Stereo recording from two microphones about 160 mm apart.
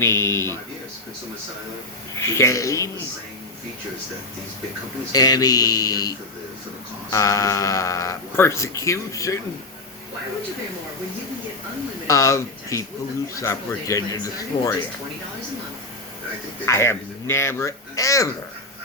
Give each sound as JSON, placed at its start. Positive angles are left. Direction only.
{"t": 0.0, "sound": "speech", "side_deg": 15}
{"t": 2.1, "sound": "speech", "side_deg": 15}
{"t": 5.1, "sound": "speech", "side_deg": 25}
{"t": 12.0, "sound": "speech", "side_deg": 20}
{"t": 16.6, "sound": "speech", "side_deg": 15}